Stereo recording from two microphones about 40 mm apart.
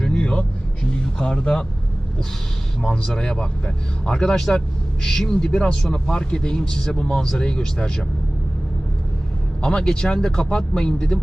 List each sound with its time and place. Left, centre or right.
0.0 s vehicle: left
0.9 s speech: left
2.8 s a man's voice: centre
9.6 s speech: left